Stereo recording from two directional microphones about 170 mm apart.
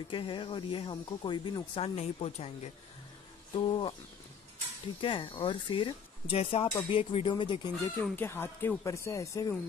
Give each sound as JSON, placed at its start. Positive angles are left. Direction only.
{"t": 0.1, "sound": "speech", "side_deg": 30}
{"t": 3.5, "sound": "speech", "side_deg": 30}
{"t": 5.0, "sound": "speech", "side_deg": 30}
{"t": 8.0, "sound": "speech", "side_deg": 10}